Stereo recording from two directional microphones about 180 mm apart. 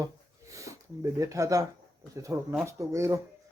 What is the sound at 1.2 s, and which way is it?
A man's voice, 15° right (ahead or behind).